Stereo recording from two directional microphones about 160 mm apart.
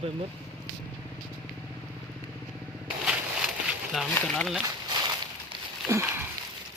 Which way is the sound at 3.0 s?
5° right (ahead or behind).